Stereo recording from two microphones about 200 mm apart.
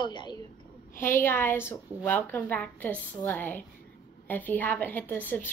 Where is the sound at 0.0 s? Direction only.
20° left (ahead or behind).